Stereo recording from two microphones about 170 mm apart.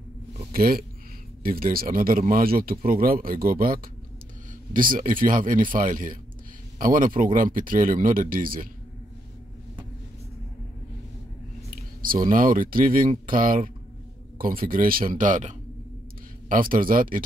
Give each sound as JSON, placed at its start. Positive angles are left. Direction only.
{"t": 0.5, "sound": "speech", "side_deg": -60}
{"t": 12.0, "sound": "speech", "side_deg": -55}